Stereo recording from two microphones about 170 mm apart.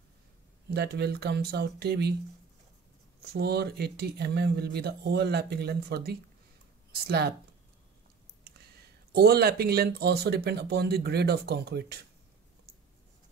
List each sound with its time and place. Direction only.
0.7 s speech: 70° right (ahead or behind)
3.2 s speech: 70° right (ahead or behind)
9.1 s speech: 70° right (ahead or behind)